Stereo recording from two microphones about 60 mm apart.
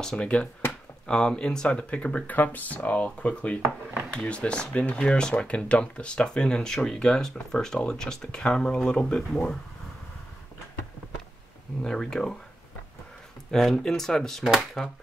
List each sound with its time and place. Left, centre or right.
0.0 s speech: centre
11.8 s speech: centre
13.5 s speech: centre